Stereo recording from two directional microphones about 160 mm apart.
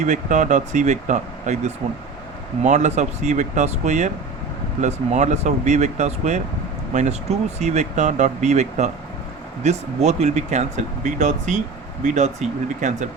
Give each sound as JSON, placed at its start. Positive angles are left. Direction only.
{"t": 0.0, "sound": "speech", "side_deg": -50}